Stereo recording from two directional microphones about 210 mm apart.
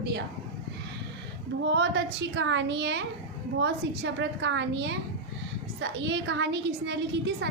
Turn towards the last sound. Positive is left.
turn(degrees=-55)  # may be behind; listen again after turning